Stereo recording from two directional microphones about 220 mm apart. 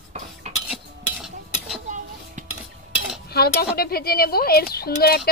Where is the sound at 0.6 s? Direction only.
Centre (ahead or behind).